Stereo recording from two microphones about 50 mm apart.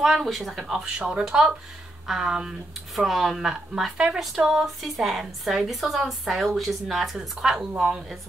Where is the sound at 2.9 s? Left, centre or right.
Centre.